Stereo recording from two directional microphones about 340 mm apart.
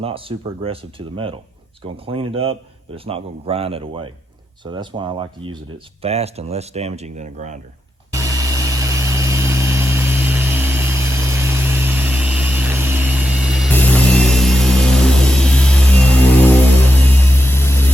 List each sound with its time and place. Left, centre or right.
0.0 s speech: centre
8.1 s vehicle: centre